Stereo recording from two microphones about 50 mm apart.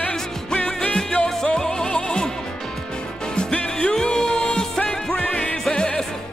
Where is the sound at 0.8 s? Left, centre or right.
Centre.